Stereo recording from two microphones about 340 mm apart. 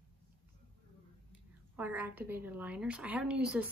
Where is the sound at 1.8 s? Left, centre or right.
Centre.